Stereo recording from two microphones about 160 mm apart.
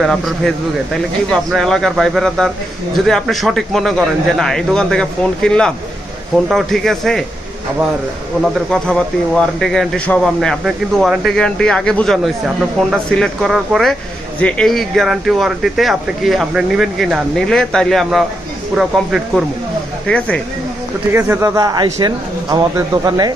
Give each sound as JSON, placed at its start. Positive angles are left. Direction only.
{"t": 0.0, "sound": "speech", "side_deg": 0}
{"t": 8.4, "sound": "speech", "side_deg": 0}
{"t": 20.1, "sound": "speech", "side_deg": 5}
{"t": 21.1, "sound": "speech", "side_deg": -15}